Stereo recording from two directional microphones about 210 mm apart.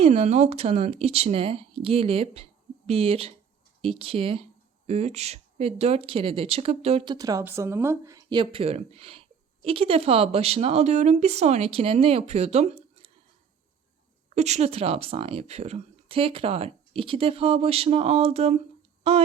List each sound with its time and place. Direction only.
0.0 s speech: 30° right (ahead or behind)
14.3 s speech: 30° right (ahead or behind)